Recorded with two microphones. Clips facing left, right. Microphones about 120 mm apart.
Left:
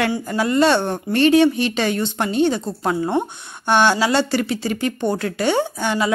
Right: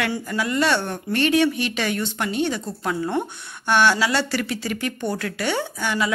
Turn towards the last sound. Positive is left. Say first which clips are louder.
# left 4 dB
turn(degrees=30)  # may be behind; listen again after turning